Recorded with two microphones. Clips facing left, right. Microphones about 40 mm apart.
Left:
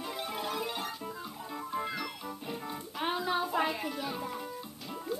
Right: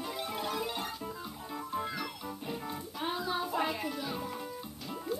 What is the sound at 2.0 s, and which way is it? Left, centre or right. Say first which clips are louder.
Music: even; centre.